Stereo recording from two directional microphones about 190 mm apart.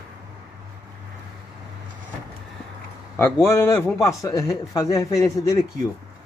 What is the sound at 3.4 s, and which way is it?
Speech, 10° left (ahead or behind).